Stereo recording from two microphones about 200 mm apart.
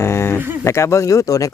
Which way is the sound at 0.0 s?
15° left (ahead or behind).